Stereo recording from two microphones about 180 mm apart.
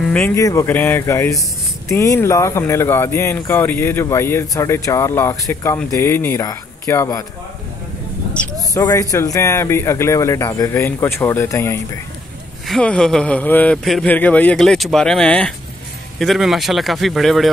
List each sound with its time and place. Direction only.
0.1 s speech: 15° left (ahead or behind)
8.3 s a sound: 5° left (ahead or behind)
8.7 s speech: 15° left (ahead or behind)
12.6 s a man's voice: centre (ahead or behind)